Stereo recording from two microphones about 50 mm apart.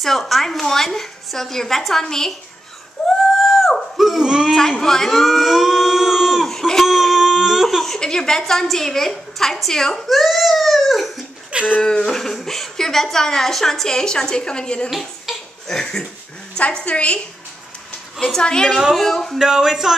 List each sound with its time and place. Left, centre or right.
0.0 s a woman's voice: centre
3.1 s a sound: centre
4.0 s speech: centre
4.6 s a woman's voice: centre
5.1 s a sound: centre
6.7 s chicken: centre
7.6 s a woman's voice: centre
10.0 s a sound: centre
11.8 s a woman's voice: centre
14.9 s speech: centre
15.6 s a woman's voice: centre
16.5 s a woman's voice: left
18.3 s a woman's voice: centre
19.3 s speech: centre